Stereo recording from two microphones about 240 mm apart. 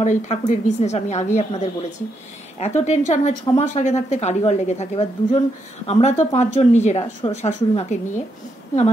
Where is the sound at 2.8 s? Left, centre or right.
Left.